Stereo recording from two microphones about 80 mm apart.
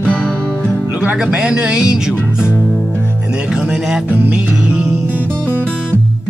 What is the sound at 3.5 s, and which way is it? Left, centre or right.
Music, centre.